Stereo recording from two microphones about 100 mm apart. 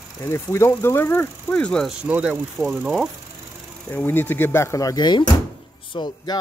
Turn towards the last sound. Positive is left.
turn(degrees=45)  # may be behind; listen again after turning